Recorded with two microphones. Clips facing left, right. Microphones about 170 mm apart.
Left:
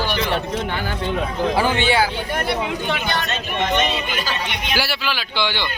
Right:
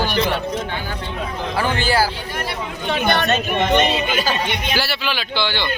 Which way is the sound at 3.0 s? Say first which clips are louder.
Right 6 dB; 55° right (ahead or behind).